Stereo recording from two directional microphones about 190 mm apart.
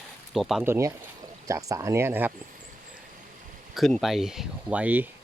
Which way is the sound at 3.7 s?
Centre (ahead or behind).